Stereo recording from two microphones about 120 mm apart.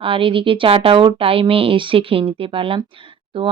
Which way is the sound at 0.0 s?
45° right (ahead or behind).